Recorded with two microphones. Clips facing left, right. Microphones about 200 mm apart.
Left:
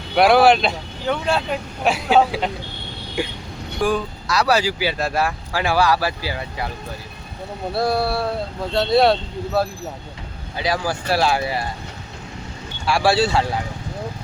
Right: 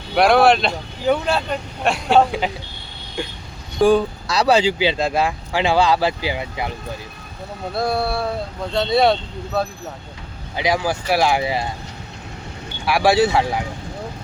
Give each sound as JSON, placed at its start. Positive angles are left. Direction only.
{"t": 0.1, "sound": "speech", "side_deg": 0}
{"t": 3.8, "sound": "speech", "side_deg": -25}
{"t": 7.7, "sound": "speech", "side_deg": 0}
{"t": 10.6, "sound": "speech", "side_deg": -15}
{"t": 12.8, "sound": "speech", "side_deg": -15}